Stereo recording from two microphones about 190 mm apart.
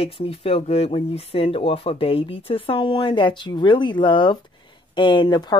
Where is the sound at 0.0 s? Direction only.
30° left (ahead or behind).